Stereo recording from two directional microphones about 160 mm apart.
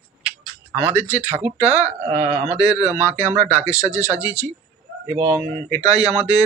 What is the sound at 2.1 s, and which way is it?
Speech, 40° right (ahead or behind).